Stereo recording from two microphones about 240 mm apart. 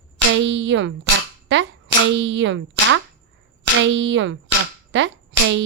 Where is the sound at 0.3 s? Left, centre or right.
Right.